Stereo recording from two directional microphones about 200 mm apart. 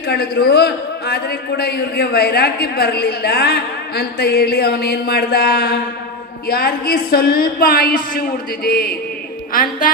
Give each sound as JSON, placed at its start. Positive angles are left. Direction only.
{"t": 0.1, "sound": "a man's voice", "side_deg": 50}